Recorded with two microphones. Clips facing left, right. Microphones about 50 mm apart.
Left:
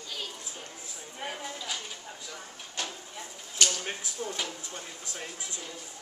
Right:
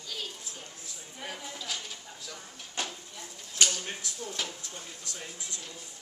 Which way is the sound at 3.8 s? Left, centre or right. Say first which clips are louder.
Left 3 dB; left.